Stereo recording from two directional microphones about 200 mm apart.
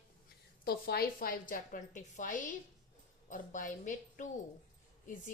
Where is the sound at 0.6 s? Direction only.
50° left (ahead or behind).